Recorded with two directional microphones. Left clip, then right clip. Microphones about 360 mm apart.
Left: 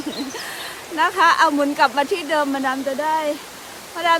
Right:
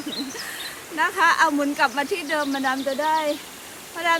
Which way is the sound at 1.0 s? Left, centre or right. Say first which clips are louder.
Left 3 dB; centre.